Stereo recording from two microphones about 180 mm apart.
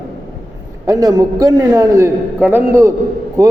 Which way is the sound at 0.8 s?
20° right (ahead or behind).